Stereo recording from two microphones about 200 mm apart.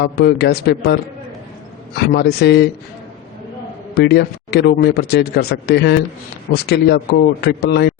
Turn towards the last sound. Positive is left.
turn(degrees=55)  # may be behind; listen again after turning